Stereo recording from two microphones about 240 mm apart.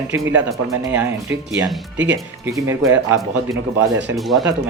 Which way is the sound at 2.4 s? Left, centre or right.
Centre.